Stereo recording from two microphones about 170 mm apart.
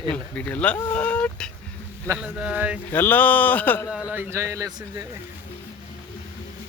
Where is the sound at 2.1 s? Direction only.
5° right (ahead or behind).